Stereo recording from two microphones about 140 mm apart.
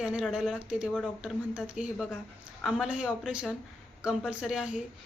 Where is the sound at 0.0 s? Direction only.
5° right (ahead or behind).